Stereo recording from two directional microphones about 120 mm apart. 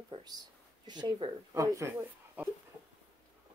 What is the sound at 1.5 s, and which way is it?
Speech, 25° right (ahead or behind).